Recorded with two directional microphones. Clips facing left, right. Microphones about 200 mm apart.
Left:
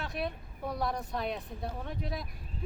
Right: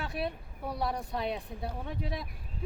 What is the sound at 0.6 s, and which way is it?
A woman's voice, 10° right (ahead or behind).